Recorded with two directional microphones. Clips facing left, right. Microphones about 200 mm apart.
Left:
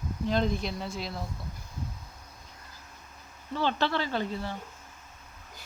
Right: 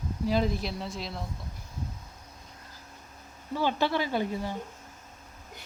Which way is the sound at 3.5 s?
10° right (ahead or behind).